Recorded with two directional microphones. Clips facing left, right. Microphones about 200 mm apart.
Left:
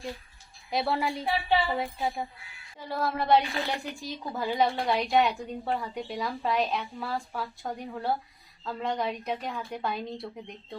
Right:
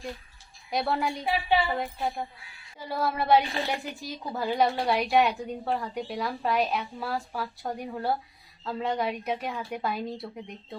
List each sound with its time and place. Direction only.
0.7 s a woman's voice: centre (ahead or behind)
1.2 s a woman's voice: 20° right (ahead or behind)
1.6 s a woman's voice: 5° left (ahead or behind)